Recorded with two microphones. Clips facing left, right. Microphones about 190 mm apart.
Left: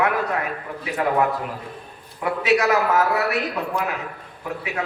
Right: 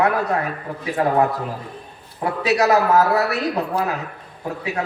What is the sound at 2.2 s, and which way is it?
Speech, 35° right (ahead or behind).